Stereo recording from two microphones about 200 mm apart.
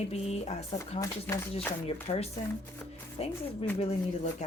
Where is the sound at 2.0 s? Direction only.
30° left (ahead or behind).